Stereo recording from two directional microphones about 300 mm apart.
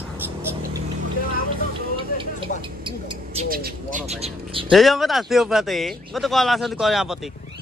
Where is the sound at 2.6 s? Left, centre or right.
Centre.